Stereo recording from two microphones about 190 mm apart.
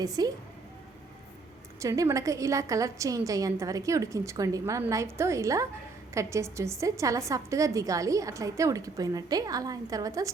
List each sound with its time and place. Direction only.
0.0 s a woman's voice: 20° right (ahead or behind)
1.8 s a woman's voice: 15° right (ahead or behind)